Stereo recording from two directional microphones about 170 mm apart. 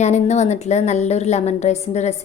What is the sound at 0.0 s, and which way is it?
A woman's voice, 40° left (ahead or behind).